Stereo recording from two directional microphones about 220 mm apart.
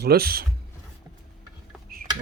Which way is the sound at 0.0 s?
45° right (ahead or behind).